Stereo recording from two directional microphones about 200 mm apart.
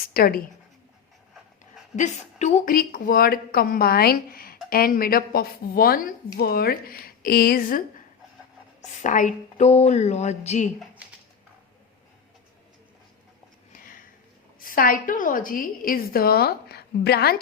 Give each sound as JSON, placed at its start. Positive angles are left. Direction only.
{"t": 0.1, "sound": "a woman's voice", "side_deg": 45}
{"t": 2.0, "sound": "a woman's voice", "side_deg": 35}
{"t": 13.7, "sound": "sniff", "side_deg": 45}
{"t": 14.6, "sound": "a woman's voice", "side_deg": 45}